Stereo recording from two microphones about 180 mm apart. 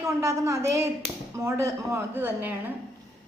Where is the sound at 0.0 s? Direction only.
15° right (ahead or behind).